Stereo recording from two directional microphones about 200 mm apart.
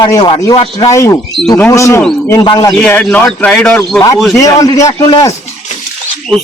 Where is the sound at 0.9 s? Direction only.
15° left (ahead or behind).